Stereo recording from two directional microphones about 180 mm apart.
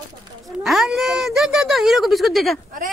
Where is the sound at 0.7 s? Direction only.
Centre (ahead or behind).